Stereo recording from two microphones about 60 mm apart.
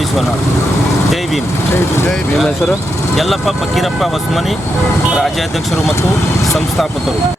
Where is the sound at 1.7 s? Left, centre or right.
Left.